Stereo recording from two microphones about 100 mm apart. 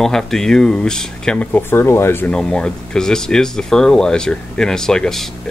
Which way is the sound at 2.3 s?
10° left (ahead or behind).